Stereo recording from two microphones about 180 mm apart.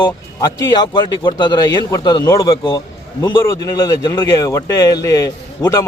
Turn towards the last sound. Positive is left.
turn(degrees=15)  # may be behind; listen again after turning